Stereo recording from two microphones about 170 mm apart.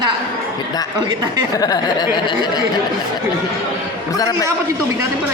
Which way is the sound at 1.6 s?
25° left (ahead or behind).